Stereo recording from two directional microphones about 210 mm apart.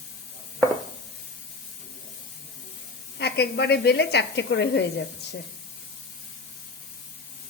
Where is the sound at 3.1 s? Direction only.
55° left (ahead or behind).